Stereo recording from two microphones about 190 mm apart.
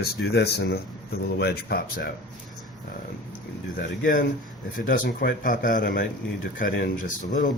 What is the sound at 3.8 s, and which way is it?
Speech, 45° left (ahead or behind).